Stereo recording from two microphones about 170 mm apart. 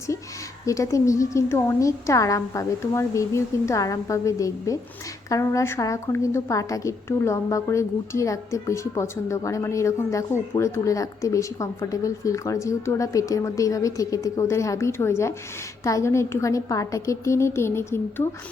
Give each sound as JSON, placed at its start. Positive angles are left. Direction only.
{"t": 0.6, "sound": "a woman's voice", "side_deg": 20}